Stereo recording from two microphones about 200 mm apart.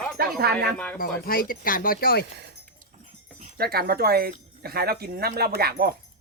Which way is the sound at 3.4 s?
45° right (ahead or behind).